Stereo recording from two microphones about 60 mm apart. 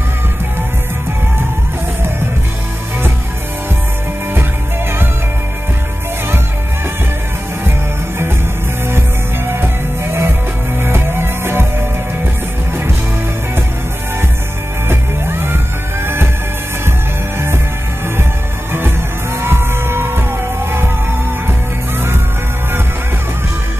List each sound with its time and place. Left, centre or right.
9.5 s music: right
14.9 s music: right
18.7 s music: right